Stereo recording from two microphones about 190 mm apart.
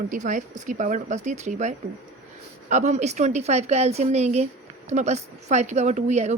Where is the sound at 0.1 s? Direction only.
40° right (ahead or behind).